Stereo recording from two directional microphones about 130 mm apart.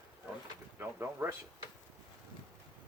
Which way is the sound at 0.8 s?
15° right (ahead or behind).